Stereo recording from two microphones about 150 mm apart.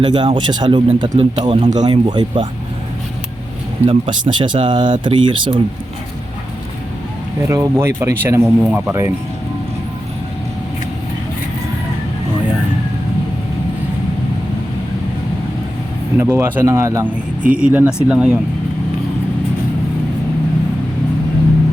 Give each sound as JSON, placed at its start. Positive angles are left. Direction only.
{"t": 0.0, "sound": "speech", "side_deg": -30}
{"t": 3.8, "sound": "speech", "side_deg": -35}
{"t": 7.4, "sound": "speech", "side_deg": -20}
{"t": 16.1, "sound": "speech", "side_deg": -15}
{"t": 17.4, "sound": "speech", "side_deg": -10}